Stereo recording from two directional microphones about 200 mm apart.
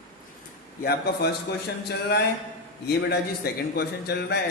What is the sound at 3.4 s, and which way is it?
Speech, 50° left (ahead or behind).